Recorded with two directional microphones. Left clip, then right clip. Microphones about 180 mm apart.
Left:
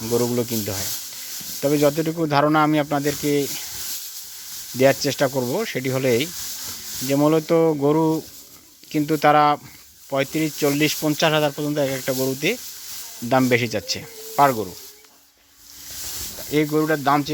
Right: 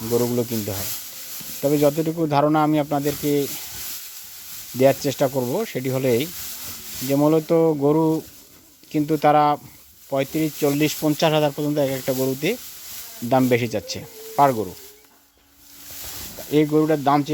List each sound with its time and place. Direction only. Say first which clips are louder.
0.1 s speech: even; 15° left (ahead or behind)
0.3 s speech: even; 5° left (ahead or behind)
5.0 s speech: even; centre (ahead or behind)
16.7 s speech: left 1 dB; 15° right (ahead or behind)